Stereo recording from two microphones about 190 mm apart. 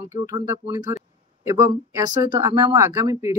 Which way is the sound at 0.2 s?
25° right (ahead or behind).